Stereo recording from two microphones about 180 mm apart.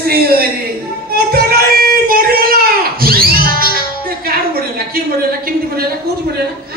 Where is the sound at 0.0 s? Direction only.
60° right (ahead or behind).